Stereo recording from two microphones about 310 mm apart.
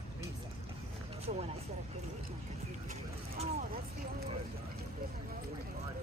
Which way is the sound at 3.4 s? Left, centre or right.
Right.